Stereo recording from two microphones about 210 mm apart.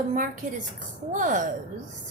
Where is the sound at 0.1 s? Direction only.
40° right (ahead or behind).